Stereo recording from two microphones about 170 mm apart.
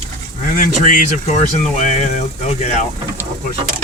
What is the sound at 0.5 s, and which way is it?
Speech, 50° left (ahead or behind).